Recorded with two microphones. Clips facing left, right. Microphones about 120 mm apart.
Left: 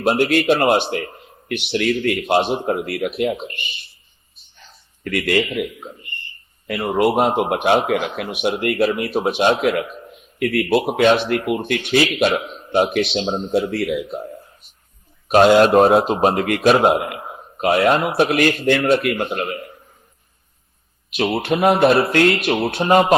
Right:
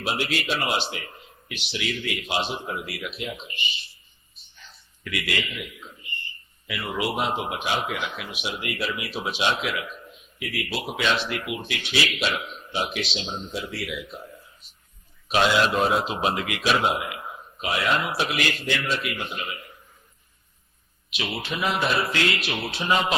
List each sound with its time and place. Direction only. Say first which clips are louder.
0.0 s a man's voice: left 11 dB; 50° left (ahead or behind)
5.0 s a man's voice: left 10 dB; 50° left (ahead or behind)
14.1 s a sound: left 11 dB; 55° left (ahead or behind)
15.3 s a man's voice: left 10 dB; 50° left (ahead or behind)
21.3 s a man's voice: left 10 dB; 60° left (ahead or behind)